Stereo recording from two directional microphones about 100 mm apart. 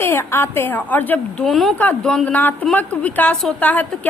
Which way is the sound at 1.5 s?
Centre (ahead or behind).